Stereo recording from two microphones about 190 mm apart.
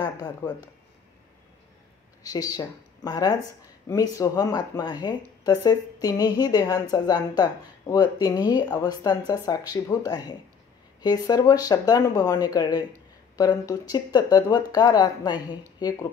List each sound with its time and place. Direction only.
0.0 s speech: 20° left (ahead or behind)
2.2 s speech: 20° left (ahead or behind)